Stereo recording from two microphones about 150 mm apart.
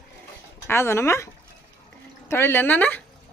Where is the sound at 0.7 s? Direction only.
15° left (ahead or behind).